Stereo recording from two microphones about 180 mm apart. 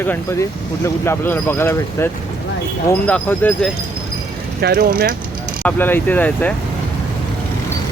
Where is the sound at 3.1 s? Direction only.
5° left (ahead or behind).